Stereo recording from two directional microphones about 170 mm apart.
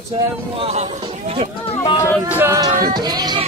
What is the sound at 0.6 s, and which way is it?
Speech, 40° right (ahead or behind).